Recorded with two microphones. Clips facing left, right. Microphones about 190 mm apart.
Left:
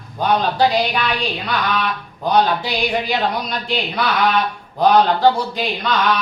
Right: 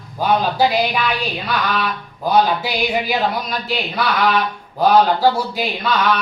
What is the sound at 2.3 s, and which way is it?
A man's voice, 5° right (ahead or behind).